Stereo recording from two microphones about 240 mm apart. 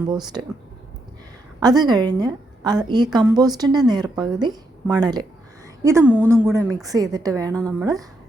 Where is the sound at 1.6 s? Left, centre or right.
Centre.